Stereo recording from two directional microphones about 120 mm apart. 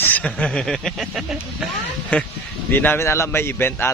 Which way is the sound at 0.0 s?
10° left (ahead or behind).